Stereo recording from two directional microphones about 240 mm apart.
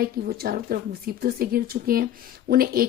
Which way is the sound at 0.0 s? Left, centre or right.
Right.